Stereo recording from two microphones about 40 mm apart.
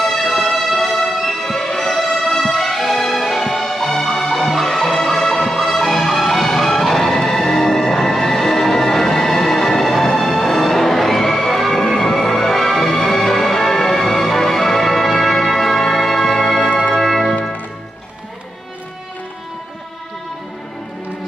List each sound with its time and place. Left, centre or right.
0.0 s music: centre